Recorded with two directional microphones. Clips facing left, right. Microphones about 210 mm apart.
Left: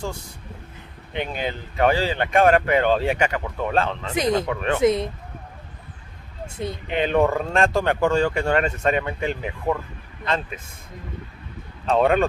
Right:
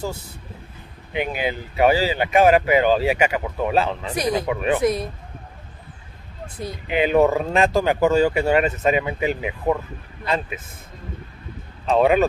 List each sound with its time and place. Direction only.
1.1 s speech: 10° right (ahead or behind)
4.8 s speech: 25° left (ahead or behind)
6.4 s speech: 25° left (ahead or behind)
6.9 s speech: 5° right (ahead or behind)
11.8 s speech: centre (ahead or behind)